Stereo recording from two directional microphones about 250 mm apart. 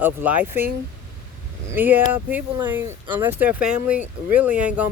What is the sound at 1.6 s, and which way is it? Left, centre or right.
Speech, centre.